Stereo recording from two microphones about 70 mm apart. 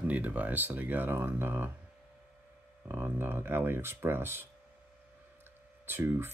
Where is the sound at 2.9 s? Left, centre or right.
Right.